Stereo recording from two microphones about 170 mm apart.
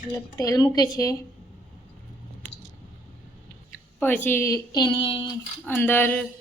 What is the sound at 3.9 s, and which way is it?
Speech, 10° left (ahead or behind).